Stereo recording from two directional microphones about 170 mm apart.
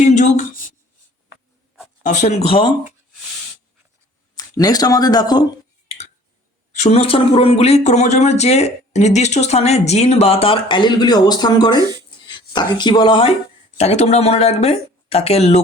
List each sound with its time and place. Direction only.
0.0 s a sound: 45° left (ahead or behind)
2.0 s speech: 45° left (ahead or behind)
4.4 s speech: 20° left (ahead or behind)
6.7 s speech: 40° left (ahead or behind)